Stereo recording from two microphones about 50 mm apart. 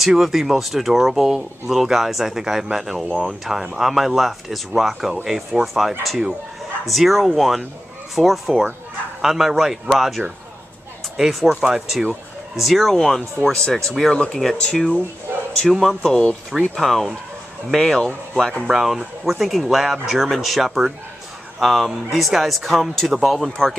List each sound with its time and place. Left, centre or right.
0.0 s speech: centre
14.1 s speech: left
15.7 s speech: centre
16.1 s speech: centre
16.7 s speech: centre
18.7 s speech: centre